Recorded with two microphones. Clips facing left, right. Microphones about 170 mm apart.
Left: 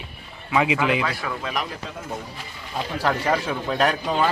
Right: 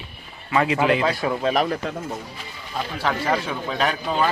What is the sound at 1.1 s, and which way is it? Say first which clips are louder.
Speech: right 7 dB; 30° right (ahead or behind).